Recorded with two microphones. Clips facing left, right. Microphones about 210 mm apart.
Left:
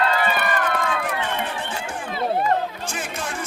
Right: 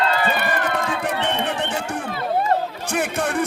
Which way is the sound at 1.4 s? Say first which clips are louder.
Right 5 dB; 70° right (ahead or behind).